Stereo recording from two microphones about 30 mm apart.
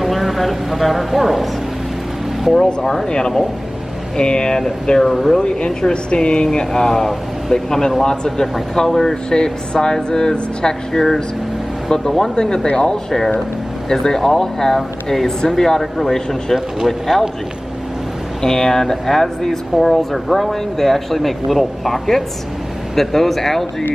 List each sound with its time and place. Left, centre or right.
0.0 s speech: centre
2.5 s speech: centre
3.1 s speech: left
5.0 s speech: centre
5.4 s speech: left
6.7 s speech: centre
7.5 s speech: left
10.9 s speech: centre
12.2 s speech: left
13.8 s speech: centre
17.1 s a man's voice: centre
18.4 s speech: centre